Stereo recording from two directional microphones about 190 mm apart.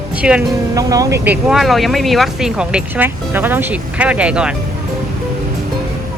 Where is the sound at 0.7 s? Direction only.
20° right (ahead or behind).